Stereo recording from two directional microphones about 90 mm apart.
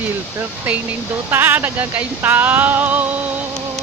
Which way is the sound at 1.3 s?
25° right (ahead or behind).